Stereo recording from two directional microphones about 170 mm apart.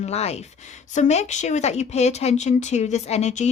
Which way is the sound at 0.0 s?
40° left (ahead or behind).